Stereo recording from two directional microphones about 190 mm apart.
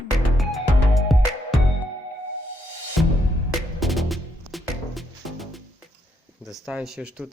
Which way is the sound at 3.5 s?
Centre (ahead or behind).